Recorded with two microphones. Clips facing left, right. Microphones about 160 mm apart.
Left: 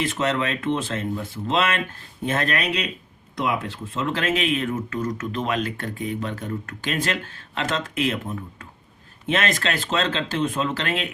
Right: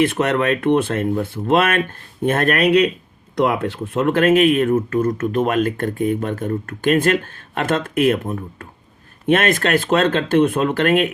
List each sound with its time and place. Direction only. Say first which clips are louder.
0.0 s speech: right 7 dB; 60° right (ahead or behind)